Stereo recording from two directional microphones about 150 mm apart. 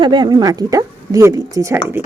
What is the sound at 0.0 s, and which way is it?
A woman's voice, 30° right (ahead or behind).